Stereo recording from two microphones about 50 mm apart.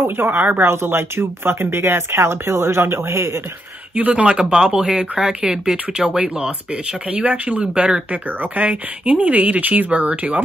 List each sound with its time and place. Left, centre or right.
0.0 s speech: right
0.7 s speech: right
4.1 s speech: right